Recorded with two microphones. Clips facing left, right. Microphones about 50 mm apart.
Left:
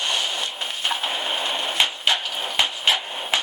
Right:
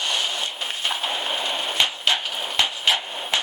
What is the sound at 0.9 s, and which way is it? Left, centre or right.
Printer, centre.